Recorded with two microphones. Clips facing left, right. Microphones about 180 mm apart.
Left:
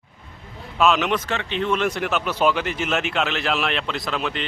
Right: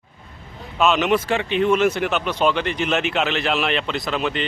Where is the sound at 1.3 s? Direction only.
10° right (ahead or behind).